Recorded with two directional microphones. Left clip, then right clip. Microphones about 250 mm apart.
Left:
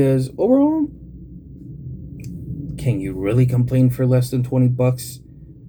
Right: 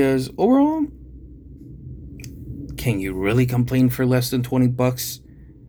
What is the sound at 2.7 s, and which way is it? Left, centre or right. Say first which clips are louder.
Speech: right 1 dB; right.